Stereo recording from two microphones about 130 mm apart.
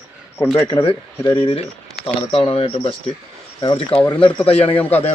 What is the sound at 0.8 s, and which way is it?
Speech, 40° left (ahead or behind).